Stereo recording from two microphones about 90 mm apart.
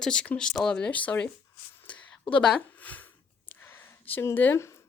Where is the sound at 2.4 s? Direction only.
15° left (ahead or behind); by 4.8 s 30° left (ahead or behind).